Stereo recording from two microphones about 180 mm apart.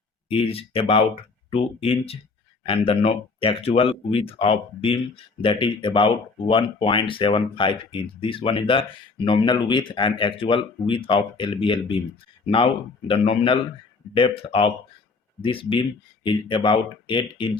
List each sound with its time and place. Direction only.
0.3 s speech: 30° left (ahead or behind)
13.1 s speech: 30° left (ahead or behind)